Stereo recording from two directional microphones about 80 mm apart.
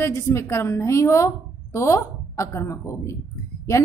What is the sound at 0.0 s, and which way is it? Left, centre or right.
A woman's voice, left.